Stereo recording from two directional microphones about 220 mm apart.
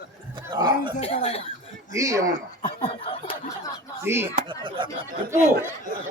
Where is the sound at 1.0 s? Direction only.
30° left (ahead or behind).